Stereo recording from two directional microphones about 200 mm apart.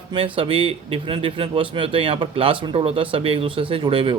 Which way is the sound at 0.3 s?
25° right (ahead or behind).